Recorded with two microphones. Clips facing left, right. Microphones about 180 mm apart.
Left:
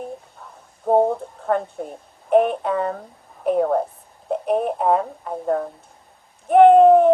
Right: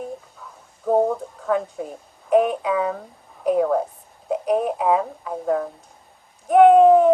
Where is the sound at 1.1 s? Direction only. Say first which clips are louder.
Even; centre (ahead or behind).